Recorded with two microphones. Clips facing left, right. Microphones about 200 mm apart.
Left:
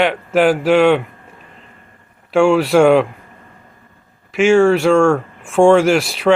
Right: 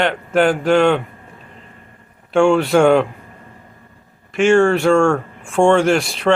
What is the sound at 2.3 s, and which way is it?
Speech, centre (ahead or behind).